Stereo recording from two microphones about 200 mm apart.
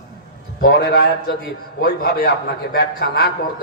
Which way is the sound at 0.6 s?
55° left (ahead or behind).